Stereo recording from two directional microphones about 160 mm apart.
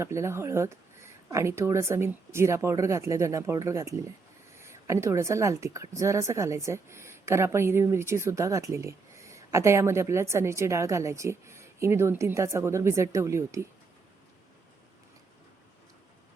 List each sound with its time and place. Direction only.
0.0 s a woman's voice: 15° right (ahead or behind)